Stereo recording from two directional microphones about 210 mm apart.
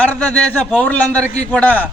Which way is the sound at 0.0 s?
5° left (ahead or behind).